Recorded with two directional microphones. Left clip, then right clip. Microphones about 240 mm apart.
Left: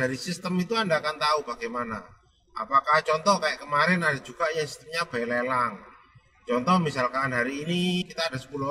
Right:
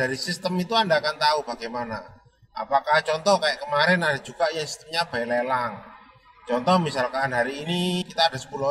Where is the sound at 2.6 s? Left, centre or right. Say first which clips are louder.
Even; left.